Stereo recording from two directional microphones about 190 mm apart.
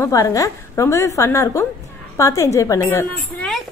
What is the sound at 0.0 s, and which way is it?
A woman's voice, 15° left (ahead or behind).